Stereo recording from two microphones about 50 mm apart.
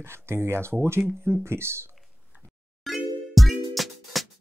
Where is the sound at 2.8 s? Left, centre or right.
Centre.